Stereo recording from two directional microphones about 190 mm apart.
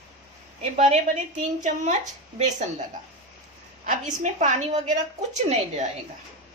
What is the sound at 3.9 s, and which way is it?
A woman's voice, 40° right (ahead or behind).